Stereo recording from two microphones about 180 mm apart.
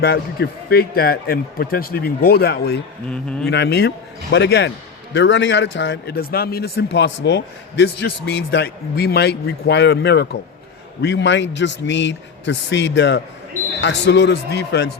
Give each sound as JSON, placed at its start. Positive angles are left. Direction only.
{"t": 0.0, "sound": "speech", "side_deg": 60}
{"t": 3.1, "sound": "speech", "side_deg": 5}
{"t": 3.5, "sound": "a man's voice", "side_deg": 70}
{"t": 5.1, "sound": "a man's voice", "side_deg": 90}
{"t": 11.0, "sound": "a man's voice", "side_deg": 80}